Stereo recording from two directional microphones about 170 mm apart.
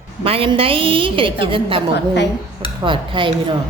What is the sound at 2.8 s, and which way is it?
Speech, 30° right (ahead or behind).